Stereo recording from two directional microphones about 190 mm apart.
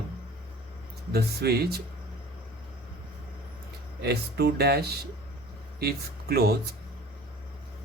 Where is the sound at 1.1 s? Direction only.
55° right (ahead or behind).